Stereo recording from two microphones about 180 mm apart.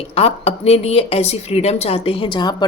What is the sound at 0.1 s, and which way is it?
Speech, 35° left (ahead or behind).